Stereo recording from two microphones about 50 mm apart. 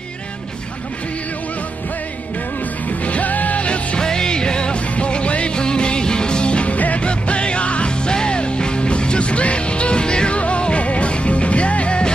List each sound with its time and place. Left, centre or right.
2.9 s music: left